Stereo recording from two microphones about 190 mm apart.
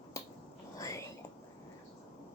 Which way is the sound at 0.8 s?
15° left (ahead or behind).